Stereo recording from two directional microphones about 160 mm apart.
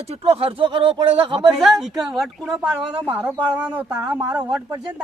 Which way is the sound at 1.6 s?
Centre (ahead or behind).